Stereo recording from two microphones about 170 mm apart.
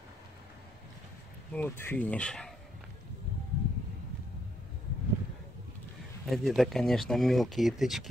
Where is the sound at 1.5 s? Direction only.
10° left (ahead or behind).